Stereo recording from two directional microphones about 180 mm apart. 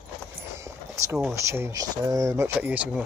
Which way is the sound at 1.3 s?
15° right (ahead or behind).